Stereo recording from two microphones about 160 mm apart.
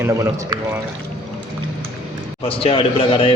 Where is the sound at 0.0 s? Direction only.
20° right (ahead or behind).